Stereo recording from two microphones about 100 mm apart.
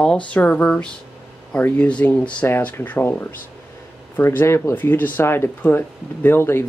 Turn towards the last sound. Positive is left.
turn(degrees=25)  # may be behind; listen again after turning